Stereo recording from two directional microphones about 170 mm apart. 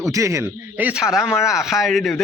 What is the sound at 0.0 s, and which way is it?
Speech, 20° right (ahead or behind).